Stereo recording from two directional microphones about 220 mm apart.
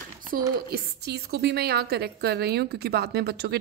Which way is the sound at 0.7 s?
50° right (ahead or behind).